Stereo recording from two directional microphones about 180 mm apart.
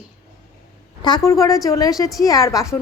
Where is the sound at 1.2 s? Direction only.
20° left (ahead or behind).